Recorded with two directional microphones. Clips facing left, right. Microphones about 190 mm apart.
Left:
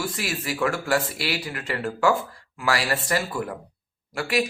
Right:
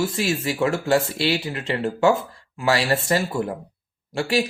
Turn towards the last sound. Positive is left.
turn(degrees=-30)  # may be behind; listen again after turning